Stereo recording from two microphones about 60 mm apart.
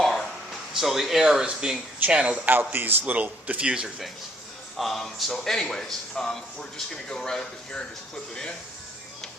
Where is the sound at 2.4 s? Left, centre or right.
Right.